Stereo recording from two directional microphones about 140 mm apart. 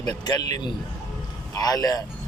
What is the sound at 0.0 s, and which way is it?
Speech, 30° left (ahead or behind).